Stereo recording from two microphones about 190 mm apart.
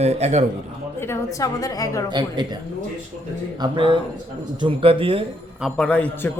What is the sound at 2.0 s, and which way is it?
Speech, 25° right (ahead or behind).